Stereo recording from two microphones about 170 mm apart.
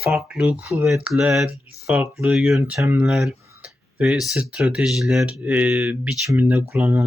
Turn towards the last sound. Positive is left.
turn(degrees=-10)  # may be behind; listen again after turning